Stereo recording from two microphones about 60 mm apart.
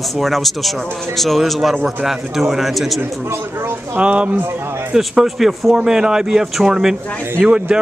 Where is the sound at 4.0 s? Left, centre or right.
Right.